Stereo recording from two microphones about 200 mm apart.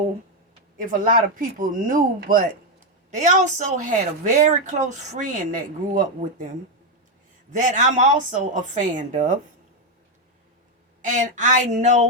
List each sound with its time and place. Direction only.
0.8 s speech: 45° right (ahead or behind)
7.5 s speech: 40° right (ahead or behind)
11.0 s speech: 40° right (ahead or behind)